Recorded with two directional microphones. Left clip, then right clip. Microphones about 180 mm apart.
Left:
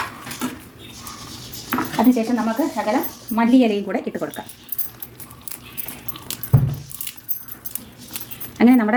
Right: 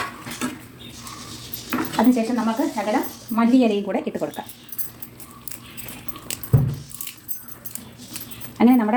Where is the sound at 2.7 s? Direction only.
20° left (ahead or behind).